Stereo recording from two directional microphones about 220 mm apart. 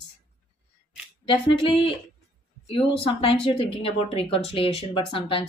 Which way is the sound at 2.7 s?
25° left (ahead or behind).